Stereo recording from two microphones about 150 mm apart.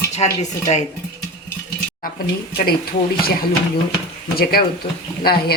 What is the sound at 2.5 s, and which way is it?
Speech, 90° left.